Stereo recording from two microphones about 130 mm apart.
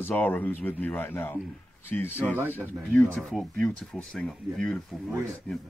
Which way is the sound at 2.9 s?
10° left (ahead or behind).